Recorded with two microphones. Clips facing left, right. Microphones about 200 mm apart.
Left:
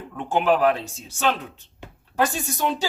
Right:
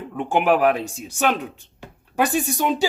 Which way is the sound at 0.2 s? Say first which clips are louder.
Right 2 dB; 15° right (ahead or behind).